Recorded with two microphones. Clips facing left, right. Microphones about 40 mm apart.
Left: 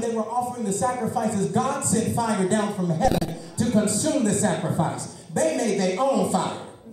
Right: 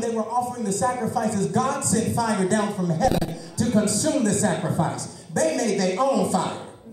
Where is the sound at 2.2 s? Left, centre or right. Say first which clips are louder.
Right 1 dB; centre.